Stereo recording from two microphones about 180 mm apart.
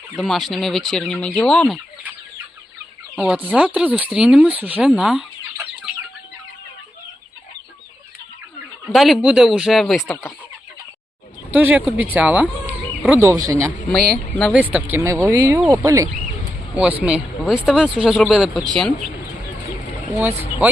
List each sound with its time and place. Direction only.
0.2 s speech: centre (ahead or behind)
3.2 s speech: 5° right (ahead or behind)
8.9 s speech: centre (ahead or behind)
11.5 s speech: 10° right (ahead or behind)
13.9 s speech: 5° left (ahead or behind)
14.6 s speech: 10° right (ahead or behind)
16.7 s speech: 5° right (ahead or behind)
20.1 s speech: 10° right (ahead or behind)